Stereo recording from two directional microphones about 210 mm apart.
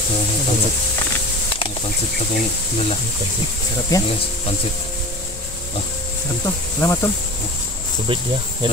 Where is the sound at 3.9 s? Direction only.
15° left (ahead or behind).